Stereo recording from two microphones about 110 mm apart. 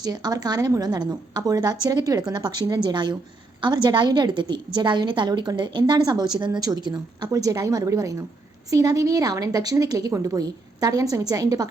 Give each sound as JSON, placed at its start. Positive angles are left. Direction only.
{"t": 0.0, "sound": "a woman's voice", "side_deg": -35}